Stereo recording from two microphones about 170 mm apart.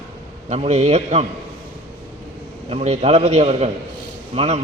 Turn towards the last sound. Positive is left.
turn(degrees=-40)  # may be behind; listen again after turning